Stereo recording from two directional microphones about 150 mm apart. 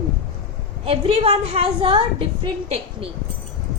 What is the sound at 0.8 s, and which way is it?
A woman's voice, 40° right (ahead or behind).